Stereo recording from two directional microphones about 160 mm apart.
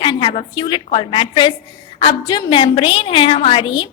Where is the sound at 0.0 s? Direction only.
35° left (ahead or behind).